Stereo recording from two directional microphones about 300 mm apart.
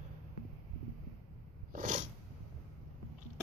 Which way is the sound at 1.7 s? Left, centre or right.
Right.